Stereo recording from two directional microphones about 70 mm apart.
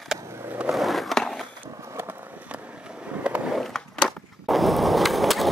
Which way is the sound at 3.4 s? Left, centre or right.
Centre.